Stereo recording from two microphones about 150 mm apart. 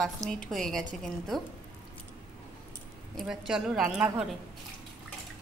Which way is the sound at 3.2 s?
Centre (ahead or behind).